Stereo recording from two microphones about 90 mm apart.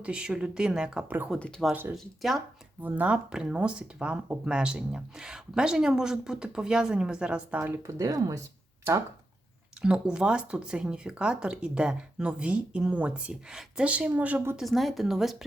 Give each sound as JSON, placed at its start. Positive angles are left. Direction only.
{"t": 0.0, "sound": "speech", "side_deg": -10}
{"t": 1.0, "sound": "speech", "side_deg": -20}
{"t": 1.4, "sound": "speech", "side_deg": 5}
{"t": 2.8, "sound": "speech", "side_deg": -15}
{"t": 7.8, "sound": "speech", "side_deg": -35}
{"t": 9.8, "sound": "speech", "side_deg": -10}
{"t": 14.5, "sound": "speech", "side_deg": 0}